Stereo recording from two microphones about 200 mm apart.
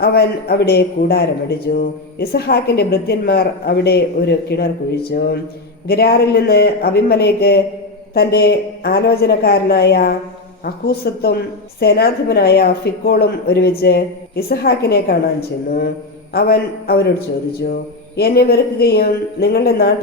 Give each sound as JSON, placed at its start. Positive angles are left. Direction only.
{"t": 0.0, "sound": "a woman's voice", "side_deg": 50}
{"t": 5.9, "sound": "a woman's voice", "side_deg": 50}
{"t": 18.2, "sound": "a woman's voice", "side_deg": 50}